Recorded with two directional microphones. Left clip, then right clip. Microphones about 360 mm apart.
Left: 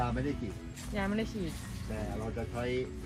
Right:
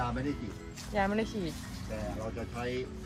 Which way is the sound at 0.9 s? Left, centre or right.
Right.